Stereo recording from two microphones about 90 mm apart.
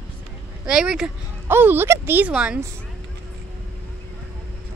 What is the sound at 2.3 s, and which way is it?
Speech, 10° right (ahead or behind).